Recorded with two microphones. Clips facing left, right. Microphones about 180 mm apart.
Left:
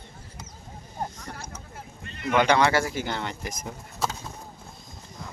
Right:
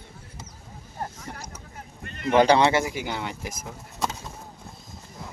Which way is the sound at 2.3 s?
35° right (ahead or behind).